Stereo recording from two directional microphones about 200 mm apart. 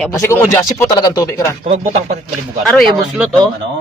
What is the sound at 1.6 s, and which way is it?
Speech, 35° right (ahead or behind).